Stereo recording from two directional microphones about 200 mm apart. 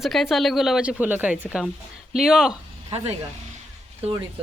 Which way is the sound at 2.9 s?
30° right (ahead or behind).